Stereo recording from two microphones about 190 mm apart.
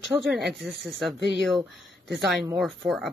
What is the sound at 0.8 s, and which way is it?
Speech, centre (ahead or behind).